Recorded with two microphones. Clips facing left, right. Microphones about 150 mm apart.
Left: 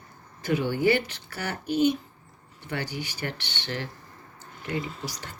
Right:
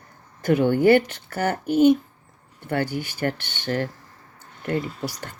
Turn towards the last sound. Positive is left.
turn(degrees=-50)  # may be behind; listen again after turning